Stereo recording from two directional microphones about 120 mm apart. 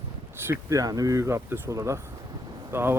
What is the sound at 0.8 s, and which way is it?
Speech, 30° right (ahead or behind).